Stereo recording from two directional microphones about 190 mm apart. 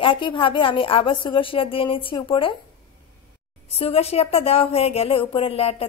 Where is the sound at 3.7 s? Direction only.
30° left (ahead or behind).